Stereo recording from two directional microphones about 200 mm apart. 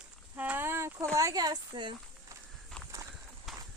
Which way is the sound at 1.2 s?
20° right (ahead or behind).